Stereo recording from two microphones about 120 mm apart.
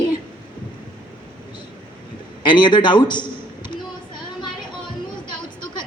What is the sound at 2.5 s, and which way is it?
A man's voice, 40° left (ahead or behind).